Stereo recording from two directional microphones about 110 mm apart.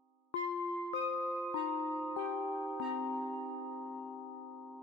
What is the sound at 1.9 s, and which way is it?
Music, 15° left (ahead or behind).